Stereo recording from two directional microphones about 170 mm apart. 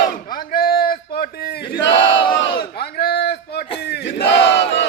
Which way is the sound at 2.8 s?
70° left (ahead or behind).